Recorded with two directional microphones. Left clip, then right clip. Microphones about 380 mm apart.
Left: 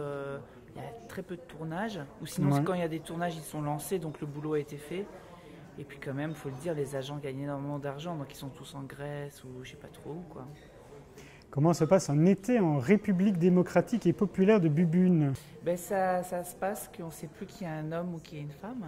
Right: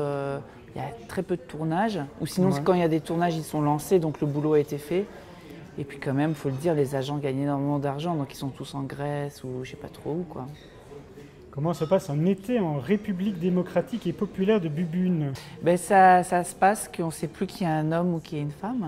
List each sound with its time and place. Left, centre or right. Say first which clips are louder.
0.0 s a sound: right 8 dB; centre
2.6 s speech: right 9 dB; centre
11.5 s speech: right 1 dB; left
15.6 s speech: right 12 dB; right